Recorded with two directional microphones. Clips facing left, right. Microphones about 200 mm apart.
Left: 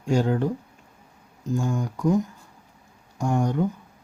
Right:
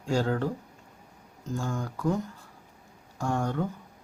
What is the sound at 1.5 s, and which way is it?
Speech, 15° left (ahead or behind).